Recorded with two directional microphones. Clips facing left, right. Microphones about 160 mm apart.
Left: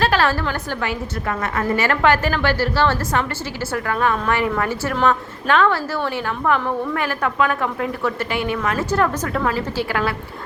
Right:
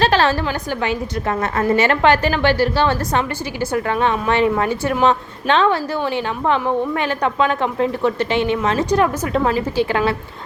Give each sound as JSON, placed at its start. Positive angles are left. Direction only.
{"t": 0.0, "sound": "a woman's voice", "side_deg": -25}